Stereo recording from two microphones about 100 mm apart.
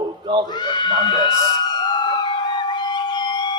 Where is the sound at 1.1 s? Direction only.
45° left (ahead or behind).